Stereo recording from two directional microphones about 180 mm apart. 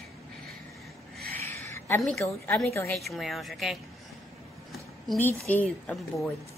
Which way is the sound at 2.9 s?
Centre (ahead or behind).